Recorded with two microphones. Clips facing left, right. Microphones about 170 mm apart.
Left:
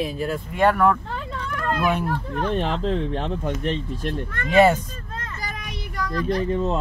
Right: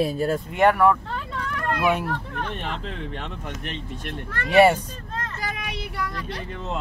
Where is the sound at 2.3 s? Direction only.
35° left (ahead or behind).